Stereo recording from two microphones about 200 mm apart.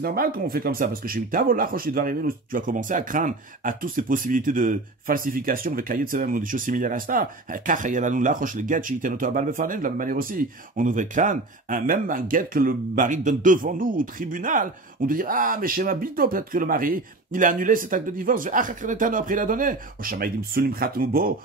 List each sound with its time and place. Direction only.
0.0 s speech: 50° right (ahead or behind)